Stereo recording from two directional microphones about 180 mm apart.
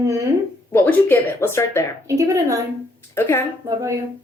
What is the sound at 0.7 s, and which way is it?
A woman's voice, 10° left (ahead or behind).